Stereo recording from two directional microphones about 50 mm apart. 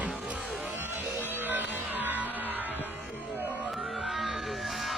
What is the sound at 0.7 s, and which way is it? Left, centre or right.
Music, right.